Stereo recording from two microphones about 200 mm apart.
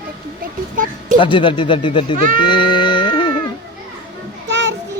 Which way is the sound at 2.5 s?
25° left (ahead or behind).